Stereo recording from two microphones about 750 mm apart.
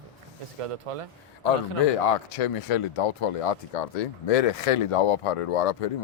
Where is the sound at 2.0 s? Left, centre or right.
Left.